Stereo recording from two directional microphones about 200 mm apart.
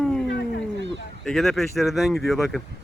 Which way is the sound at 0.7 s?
60° right (ahead or behind).